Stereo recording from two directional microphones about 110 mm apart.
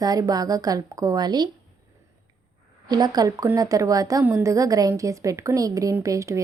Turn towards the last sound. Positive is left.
turn(degrees=-30)  # may be behind; listen again after turning